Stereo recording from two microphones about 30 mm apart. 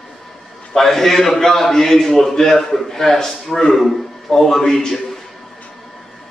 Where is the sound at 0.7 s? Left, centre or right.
Centre.